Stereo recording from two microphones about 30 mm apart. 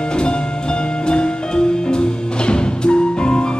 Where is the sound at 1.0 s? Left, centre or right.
Left.